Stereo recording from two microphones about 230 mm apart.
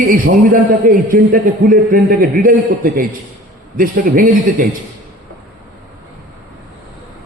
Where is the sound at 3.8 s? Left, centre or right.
Right.